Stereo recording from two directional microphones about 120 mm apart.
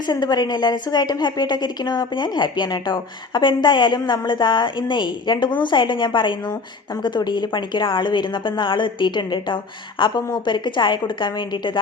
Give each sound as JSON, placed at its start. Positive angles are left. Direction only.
{"t": 0.1, "sound": "a woman's voice", "side_deg": 35}